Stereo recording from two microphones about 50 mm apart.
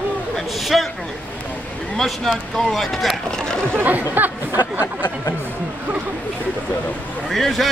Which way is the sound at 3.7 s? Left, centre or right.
Right.